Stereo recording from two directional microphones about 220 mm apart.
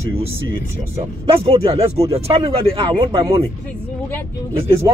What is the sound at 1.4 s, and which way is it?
Speech, 25° right (ahead or behind).